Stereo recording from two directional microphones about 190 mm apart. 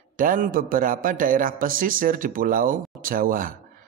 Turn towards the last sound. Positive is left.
turn(degrees=-45)  # may be behind; listen again after turning